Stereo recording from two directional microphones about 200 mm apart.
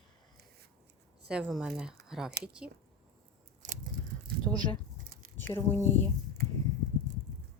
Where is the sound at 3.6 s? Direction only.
40° right (ahead or behind).